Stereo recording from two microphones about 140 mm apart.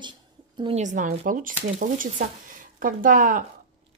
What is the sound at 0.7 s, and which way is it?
Speech, 60° right (ahead or behind).